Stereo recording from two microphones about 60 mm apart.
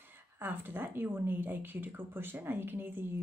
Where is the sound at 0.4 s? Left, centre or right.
Right.